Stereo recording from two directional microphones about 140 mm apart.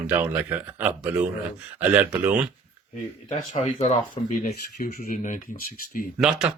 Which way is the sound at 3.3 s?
55° left (ahead or behind).